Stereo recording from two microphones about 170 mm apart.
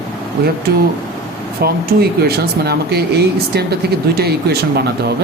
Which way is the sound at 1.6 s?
65° right (ahead or behind).